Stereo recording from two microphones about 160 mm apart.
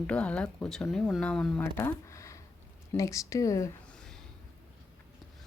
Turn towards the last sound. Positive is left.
turn(degrees=20)  # may be behind; listen again after turning